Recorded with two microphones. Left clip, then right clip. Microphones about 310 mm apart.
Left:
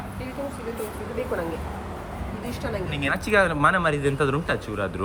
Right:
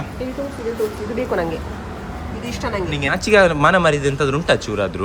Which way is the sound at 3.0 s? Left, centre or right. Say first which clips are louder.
Right 7 dB; centre.